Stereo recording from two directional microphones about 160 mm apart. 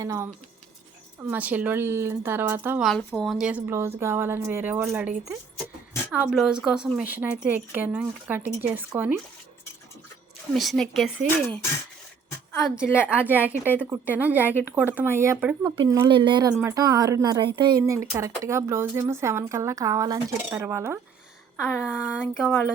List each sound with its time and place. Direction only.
0.0 s speech: 20° right (ahead or behind)
1.3 s speech: 10° right (ahead or behind)
3.1 s speech: 5° left (ahead or behind); by 9.1 s 10° right (ahead or behind)
10.5 s speech: centre (ahead or behind)
13.1 s speech: 10° right (ahead or behind)
15.6 s speech: 25° right (ahead or behind)
21.6 s speech: 5° right (ahead or behind)